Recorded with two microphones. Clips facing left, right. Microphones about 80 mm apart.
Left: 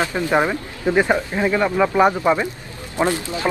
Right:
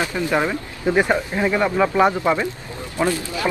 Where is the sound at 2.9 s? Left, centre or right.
Left.